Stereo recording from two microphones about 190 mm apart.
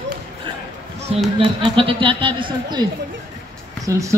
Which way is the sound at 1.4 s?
25° right (ahead or behind).